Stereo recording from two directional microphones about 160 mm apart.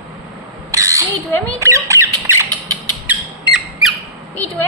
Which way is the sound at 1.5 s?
20° right (ahead or behind).